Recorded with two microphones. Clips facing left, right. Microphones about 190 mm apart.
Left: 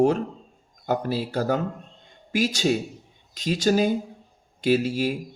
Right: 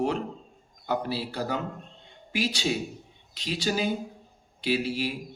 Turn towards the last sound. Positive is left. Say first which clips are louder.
# left 6 dB
turn(degrees=45)  # may be behind; listen again after turning